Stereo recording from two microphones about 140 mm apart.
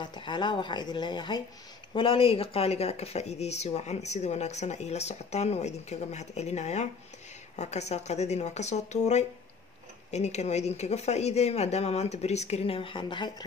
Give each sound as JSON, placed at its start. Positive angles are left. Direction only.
{"t": 0.0, "sound": "speech", "side_deg": 35}